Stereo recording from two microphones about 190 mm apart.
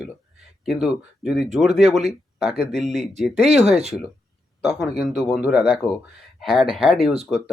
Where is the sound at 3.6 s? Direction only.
35° right (ahead or behind).